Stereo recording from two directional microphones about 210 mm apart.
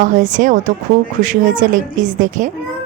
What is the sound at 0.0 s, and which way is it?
A woman's voice, 40° right (ahead or behind).